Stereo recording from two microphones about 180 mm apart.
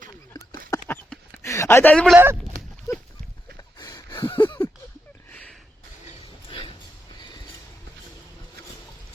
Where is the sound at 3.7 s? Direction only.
25° left (ahead or behind).